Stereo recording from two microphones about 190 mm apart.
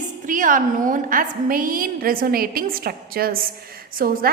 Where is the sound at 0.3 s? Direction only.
45° right (ahead or behind).